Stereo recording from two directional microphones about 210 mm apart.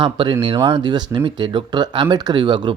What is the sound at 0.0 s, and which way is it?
Speech, 20° right (ahead or behind).